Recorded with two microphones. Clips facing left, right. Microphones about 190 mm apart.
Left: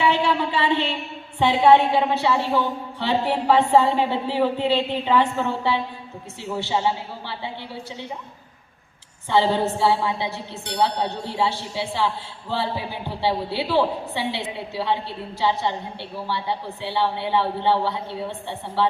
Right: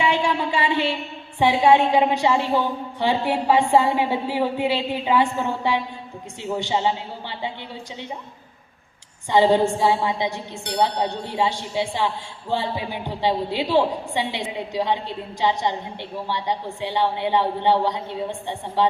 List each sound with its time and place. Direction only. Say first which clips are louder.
0.0 s a sound: left 1 dB; 15° right (ahead or behind)
1.4 s a woman's voice: left 1 dB; 10° right (ahead or behind)
9.3 s a woman's voice: right 3 dB; 15° right (ahead or behind)